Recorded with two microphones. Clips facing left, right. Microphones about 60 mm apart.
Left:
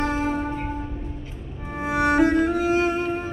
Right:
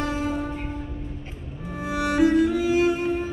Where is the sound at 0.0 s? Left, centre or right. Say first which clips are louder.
Left 2 dB; left.